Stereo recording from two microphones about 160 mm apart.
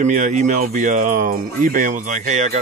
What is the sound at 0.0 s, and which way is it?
Speech, 50° right (ahead or behind).